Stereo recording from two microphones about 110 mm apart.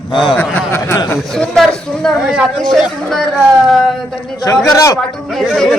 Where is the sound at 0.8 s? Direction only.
30° left (ahead or behind).